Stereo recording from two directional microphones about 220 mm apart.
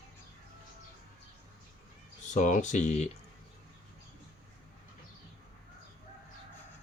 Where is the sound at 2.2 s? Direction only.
35° left (ahead or behind).